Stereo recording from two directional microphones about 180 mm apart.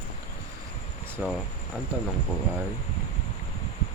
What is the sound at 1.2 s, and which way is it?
Speech, 10° right (ahead or behind).